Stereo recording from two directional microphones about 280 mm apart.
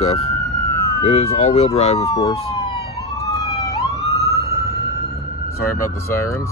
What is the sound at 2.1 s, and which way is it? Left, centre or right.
Emergency vehicle, centre.